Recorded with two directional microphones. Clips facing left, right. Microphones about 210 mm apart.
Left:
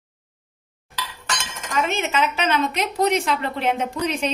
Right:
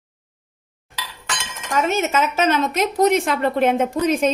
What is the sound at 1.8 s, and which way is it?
A woman's voice, 40° right (ahead or behind).